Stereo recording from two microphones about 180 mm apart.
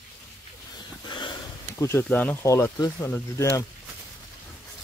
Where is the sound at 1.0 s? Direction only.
25° left (ahead or behind).